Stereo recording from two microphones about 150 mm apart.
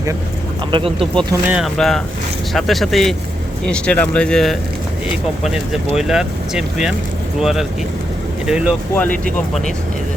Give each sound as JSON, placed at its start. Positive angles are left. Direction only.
{"t": 0.7, "sound": "speech", "side_deg": -35}
{"t": 1.5, "sound": "speech", "side_deg": 0}
{"t": 6.0, "sound": "speech", "side_deg": -5}
{"t": 8.4, "sound": "speech", "side_deg": -5}
{"t": 9.0, "sound": "speech", "side_deg": 10}